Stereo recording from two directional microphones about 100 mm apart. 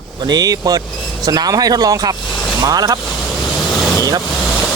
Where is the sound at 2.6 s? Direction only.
35° right (ahead or behind).